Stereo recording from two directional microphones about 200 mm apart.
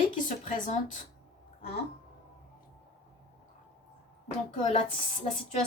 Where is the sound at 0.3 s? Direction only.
40° left (ahead or behind).